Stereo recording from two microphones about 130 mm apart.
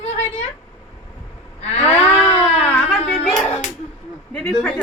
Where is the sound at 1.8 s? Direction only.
10° left (ahead or behind).